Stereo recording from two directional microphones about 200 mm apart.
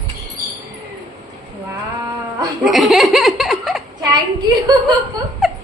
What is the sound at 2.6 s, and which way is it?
Speech, centre (ahead or behind).